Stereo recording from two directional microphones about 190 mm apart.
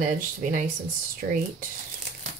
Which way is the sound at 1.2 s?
55° right (ahead or behind).